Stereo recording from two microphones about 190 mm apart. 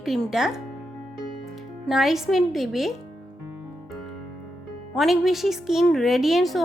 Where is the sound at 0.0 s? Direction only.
Centre (ahead or behind).